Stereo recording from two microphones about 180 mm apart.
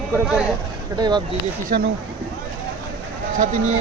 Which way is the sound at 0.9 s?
25° right (ahead or behind).